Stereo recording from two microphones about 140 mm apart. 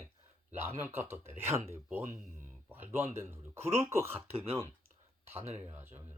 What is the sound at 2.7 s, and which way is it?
A man's voice, 15° right (ahead or behind).